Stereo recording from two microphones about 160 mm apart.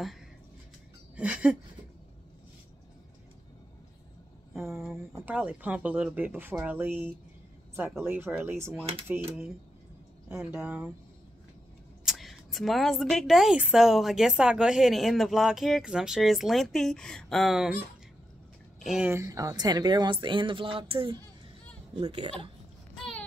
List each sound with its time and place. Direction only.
1.1 s speech: 10° right (ahead or behind)
5.2 s speech: 5° right (ahead or behind)
10.2 s speech: 15° right (ahead or behind)
12.0 s speech: centre (ahead or behind)
18.9 s speech: 5° right (ahead or behind)
19.1 s speech: 20° right (ahead or behind); by 22.5 s 35° right (ahead or behind)